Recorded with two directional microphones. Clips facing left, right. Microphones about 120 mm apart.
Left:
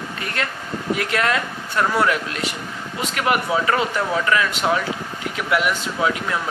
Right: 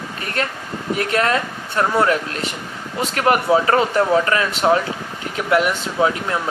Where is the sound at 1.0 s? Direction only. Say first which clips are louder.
Right 4 dB; 35° right (ahead or behind).